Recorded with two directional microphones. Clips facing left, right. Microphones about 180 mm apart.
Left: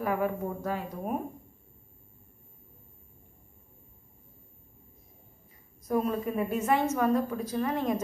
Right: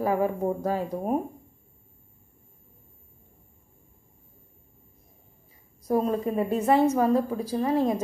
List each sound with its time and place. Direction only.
0.0 s a woman's voice: 35° right (ahead or behind)
5.9 s a woman's voice: 30° right (ahead or behind)